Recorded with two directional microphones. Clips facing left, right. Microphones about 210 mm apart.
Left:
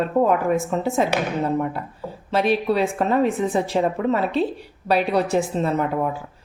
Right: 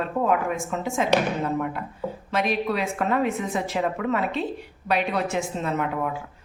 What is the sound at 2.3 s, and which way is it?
Speech, 30° left (ahead or behind).